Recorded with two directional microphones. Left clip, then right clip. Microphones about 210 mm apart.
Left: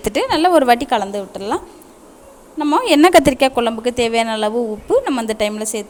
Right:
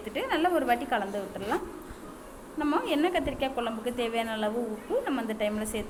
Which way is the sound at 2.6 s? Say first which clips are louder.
Left 12 dB; 35° left (ahead or behind).